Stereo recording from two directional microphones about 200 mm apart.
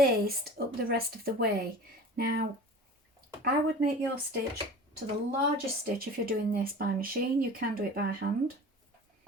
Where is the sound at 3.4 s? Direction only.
50° right (ahead or behind).